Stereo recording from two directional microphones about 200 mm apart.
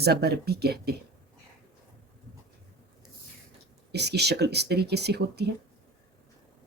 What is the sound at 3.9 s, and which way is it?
Speech, 55° right (ahead or behind).